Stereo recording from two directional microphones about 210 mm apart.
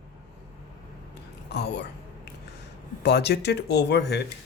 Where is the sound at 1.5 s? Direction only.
55° left (ahead or behind).